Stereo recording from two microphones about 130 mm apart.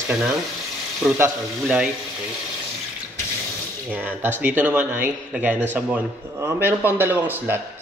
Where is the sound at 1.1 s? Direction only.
20° right (ahead or behind).